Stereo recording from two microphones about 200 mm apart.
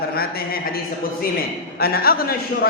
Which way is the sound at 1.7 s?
50° left (ahead or behind).